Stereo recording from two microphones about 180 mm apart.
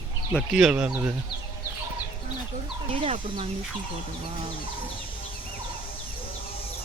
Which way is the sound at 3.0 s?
30° right (ahead or behind).